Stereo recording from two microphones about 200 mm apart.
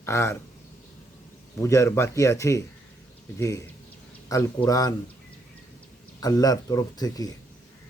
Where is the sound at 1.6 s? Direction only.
15° left (ahead or behind).